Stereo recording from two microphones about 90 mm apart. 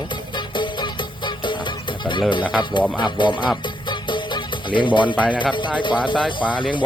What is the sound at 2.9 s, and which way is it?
Speech, 60° left (ahead or behind).